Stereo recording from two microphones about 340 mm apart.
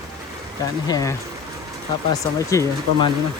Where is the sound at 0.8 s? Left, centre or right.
Centre.